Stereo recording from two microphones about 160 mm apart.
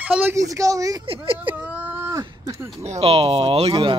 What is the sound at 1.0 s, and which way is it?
Speech, 35° right (ahead or behind).